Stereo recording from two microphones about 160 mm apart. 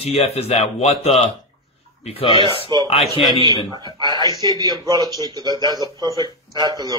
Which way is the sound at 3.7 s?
30° right (ahead or behind).